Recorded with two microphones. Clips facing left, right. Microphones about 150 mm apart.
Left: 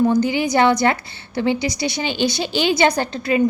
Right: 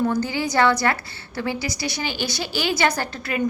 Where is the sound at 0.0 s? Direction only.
15° left (ahead or behind).